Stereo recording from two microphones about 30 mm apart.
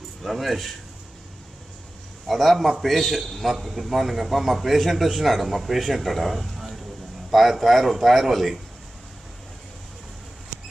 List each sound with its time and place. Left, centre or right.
0.2 s a man's voice: centre
2.2 s a man's voice: centre